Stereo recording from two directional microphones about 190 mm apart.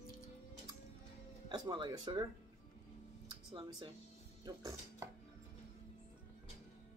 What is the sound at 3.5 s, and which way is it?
Speech, 25° right (ahead or behind).